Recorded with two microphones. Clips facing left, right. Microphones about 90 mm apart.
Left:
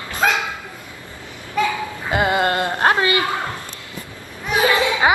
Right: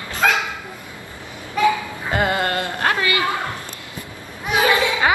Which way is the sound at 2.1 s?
15° left (ahead or behind).